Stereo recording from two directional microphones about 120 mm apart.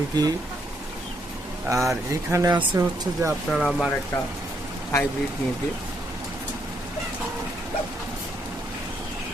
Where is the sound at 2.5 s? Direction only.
40° right (ahead or behind).